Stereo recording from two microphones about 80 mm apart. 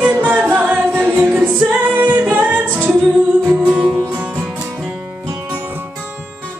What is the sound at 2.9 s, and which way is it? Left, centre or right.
Music, centre.